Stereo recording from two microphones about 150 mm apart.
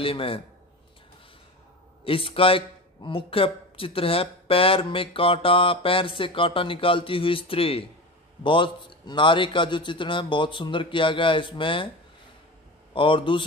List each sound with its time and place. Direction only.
0.0 s a man's voice: 40° left (ahead or behind)
2.0 s a man's voice: 35° left (ahead or behind)
12.9 s a man's voice: 35° left (ahead or behind)